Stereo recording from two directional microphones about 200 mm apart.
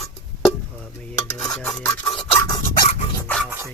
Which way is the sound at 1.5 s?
5° left (ahead or behind).